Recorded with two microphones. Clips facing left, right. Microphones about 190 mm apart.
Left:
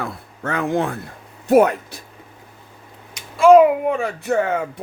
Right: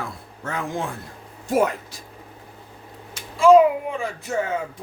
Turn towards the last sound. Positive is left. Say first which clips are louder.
# left 5 dB
turn(degrees=65)  # may be behind; listen again after turning